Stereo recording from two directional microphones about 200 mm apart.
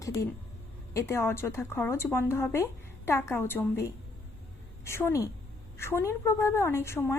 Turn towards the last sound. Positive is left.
turn(degrees=15)  # may be behind; listen again after turning